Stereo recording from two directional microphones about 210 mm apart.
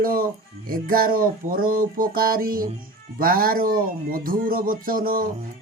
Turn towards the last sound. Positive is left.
turn(degrees=-45)  # may be behind; listen again after turning